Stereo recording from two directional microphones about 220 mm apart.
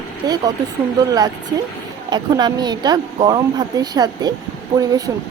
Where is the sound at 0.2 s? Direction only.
15° right (ahead or behind).